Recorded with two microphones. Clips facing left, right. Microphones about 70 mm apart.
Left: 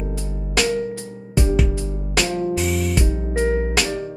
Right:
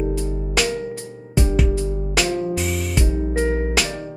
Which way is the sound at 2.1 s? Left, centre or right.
Centre.